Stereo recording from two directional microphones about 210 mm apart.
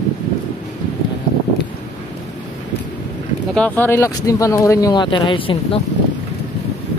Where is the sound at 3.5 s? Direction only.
10° left (ahead or behind); by 5.8 s 25° left (ahead or behind).